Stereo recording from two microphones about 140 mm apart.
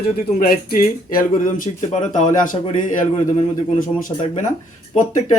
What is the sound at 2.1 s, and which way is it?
Speech, 65° left (ahead or behind).